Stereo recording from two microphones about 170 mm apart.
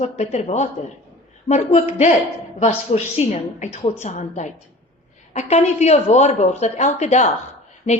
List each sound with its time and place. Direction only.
0.0 s speech: 40° left (ahead or behind)